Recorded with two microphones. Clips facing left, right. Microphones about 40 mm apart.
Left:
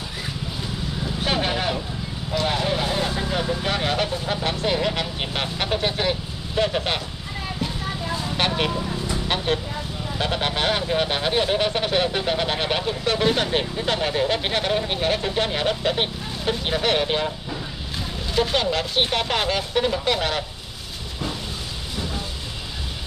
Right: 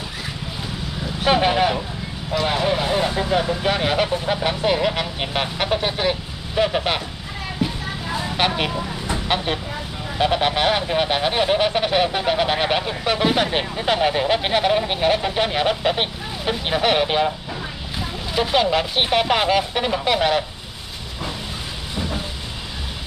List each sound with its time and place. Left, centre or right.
1.2 s speech: centre
8.4 s speech: centre
8.7 s vehicle: right
9.3 s speech: centre
18.3 s speech: centre